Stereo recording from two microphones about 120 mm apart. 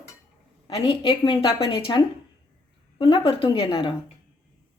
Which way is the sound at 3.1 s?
50° left (ahead or behind).